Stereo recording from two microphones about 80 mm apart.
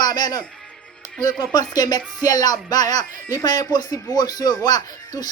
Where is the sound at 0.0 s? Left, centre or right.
Left.